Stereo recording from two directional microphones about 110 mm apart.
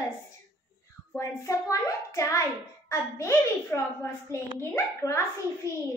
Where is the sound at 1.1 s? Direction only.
25° left (ahead or behind).